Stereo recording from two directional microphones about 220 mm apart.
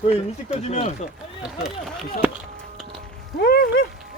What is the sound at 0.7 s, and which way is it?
Speech, 30° left (ahead or behind).